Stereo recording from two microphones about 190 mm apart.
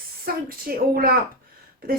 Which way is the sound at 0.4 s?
50° right (ahead or behind).